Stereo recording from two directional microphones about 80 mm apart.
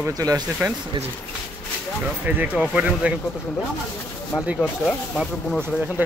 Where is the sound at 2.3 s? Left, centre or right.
Centre.